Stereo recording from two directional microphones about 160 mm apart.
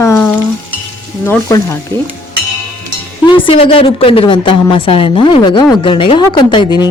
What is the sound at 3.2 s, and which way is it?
A woman's voice, 30° left (ahead or behind).